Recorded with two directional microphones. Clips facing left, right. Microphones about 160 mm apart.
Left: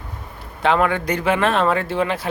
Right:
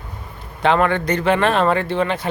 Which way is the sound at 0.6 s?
5° left (ahead or behind).